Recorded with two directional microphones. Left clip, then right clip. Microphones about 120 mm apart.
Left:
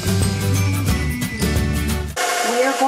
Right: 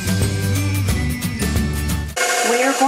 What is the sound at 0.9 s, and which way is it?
Music, centre (ahead or behind).